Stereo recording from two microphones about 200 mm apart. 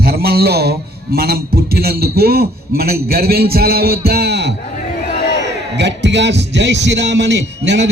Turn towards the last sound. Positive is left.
turn(degrees=-60)  # may be behind; listen again after turning